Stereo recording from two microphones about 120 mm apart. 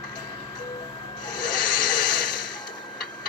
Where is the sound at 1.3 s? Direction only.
40° left (ahead or behind).